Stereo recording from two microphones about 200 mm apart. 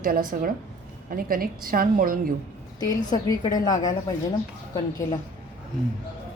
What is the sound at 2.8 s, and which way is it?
A woman's voice, 20° left (ahead or behind).